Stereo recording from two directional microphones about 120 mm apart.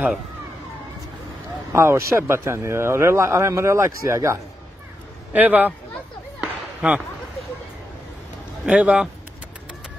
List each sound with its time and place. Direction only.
1.7 s speech: 20° right (ahead or behind)
5.3 s a man's voice: 15° right (ahead or behind)
6.8 s a man's voice: 10° right (ahead or behind)
8.6 s a man's voice: 10° right (ahead or behind)